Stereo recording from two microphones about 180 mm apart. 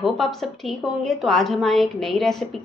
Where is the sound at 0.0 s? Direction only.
Centre (ahead or behind).